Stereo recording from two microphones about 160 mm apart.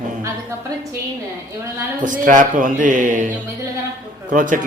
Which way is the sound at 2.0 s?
55° right (ahead or behind).